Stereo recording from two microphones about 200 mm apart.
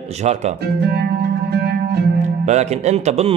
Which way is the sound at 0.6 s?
55° right (ahead or behind).